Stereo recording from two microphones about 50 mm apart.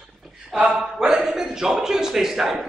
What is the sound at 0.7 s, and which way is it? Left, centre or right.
A man's voice, centre.